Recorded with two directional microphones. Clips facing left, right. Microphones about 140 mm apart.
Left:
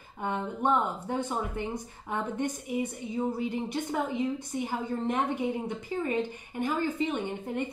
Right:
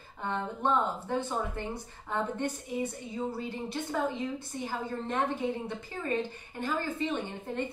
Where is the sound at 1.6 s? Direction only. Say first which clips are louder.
Left 3 dB; 15° left (ahead or behind).